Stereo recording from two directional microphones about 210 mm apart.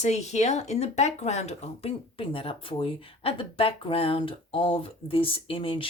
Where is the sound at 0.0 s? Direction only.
30° left (ahead or behind).